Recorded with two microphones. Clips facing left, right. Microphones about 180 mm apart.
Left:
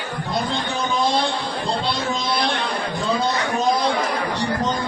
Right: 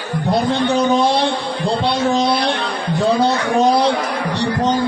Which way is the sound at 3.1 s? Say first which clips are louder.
Right 6 dB; 75° right (ahead or behind).